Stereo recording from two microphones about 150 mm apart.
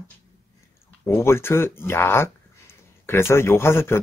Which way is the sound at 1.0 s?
15° left (ahead or behind).